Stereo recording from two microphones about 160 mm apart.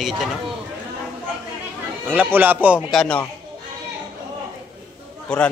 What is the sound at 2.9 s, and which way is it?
Speech, 5° left (ahead or behind).